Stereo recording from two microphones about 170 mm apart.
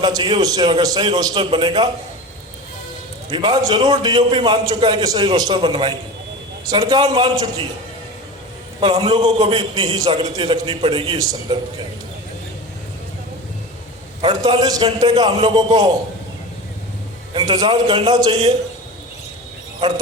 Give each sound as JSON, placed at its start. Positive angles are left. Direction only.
{"t": 0.0, "sound": "a man's voice", "side_deg": -25}
{"t": 3.2, "sound": "a man's voice", "side_deg": -30}
{"t": 8.8, "sound": "a man's voice", "side_deg": -35}
{"t": 14.2, "sound": "a man's voice", "side_deg": -30}
{"t": 17.3, "sound": "a man's voice", "side_deg": -25}